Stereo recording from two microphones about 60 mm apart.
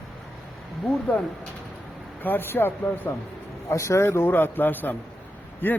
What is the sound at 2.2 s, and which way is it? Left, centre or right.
Speech, left.